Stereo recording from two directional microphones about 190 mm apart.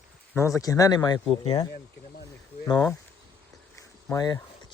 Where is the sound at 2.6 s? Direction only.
20° left (ahead or behind).